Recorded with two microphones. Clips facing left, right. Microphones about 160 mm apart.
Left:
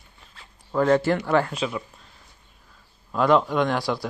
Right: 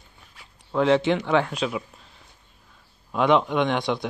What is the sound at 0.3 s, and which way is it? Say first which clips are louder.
Zipper: left 1 dB; 10° right (ahead or behind).